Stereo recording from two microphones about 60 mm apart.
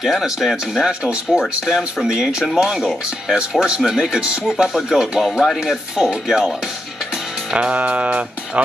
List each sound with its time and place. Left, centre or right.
0.0 s speech: centre
7.5 s speech: right